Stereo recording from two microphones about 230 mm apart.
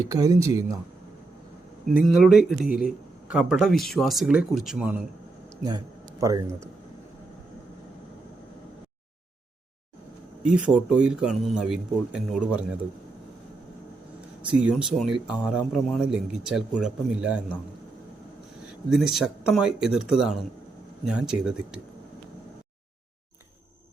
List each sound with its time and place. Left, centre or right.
0.0 s speech: centre
1.9 s speech: centre
5.6 s a man's voice: centre
10.4 s speech: centre
14.5 s speech: centre
18.9 s speech: centre